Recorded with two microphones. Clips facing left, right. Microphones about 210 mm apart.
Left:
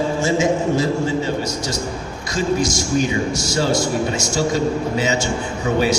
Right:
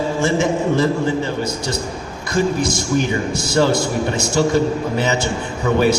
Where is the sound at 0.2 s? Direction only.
60° right (ahead or behind).